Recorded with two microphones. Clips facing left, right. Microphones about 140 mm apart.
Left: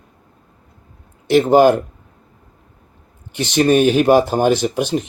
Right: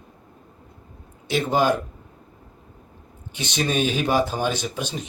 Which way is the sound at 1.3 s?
60° left (ahead or behind).